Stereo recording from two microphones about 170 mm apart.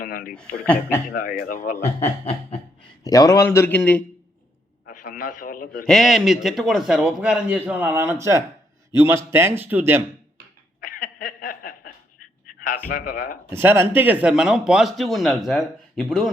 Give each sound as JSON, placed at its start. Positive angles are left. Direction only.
{"t": 0.0, "sound": "speech", "side_deg": 55}
{"t": 0.6, "sound": "a man's voice", "side_deg": 10}
{"t": 1.1, "sound": "speech", "side_deg": 55}
{"t": 3.0, "sound": "a man's voice", "side_deg": 20}
{"t": 4.9, "sound": "a man's voice", "side_deg": 55}
{"t": 5.8, "sound": "speech", "side_deg": 0}
{"t": 10.8, "sound": "chuckle", "side_deg": 50}
{"t": 12.9, "sound": "speech", "side_deg": 55}
{"t": 13.5, "sound": "speech", "side_deg": -15}